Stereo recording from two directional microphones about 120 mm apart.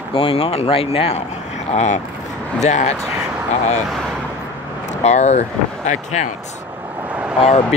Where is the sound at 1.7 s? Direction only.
70° left (ahead or behind).